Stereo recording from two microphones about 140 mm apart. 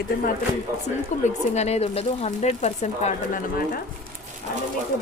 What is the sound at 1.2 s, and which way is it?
Speech, 50° left (ahead or behind).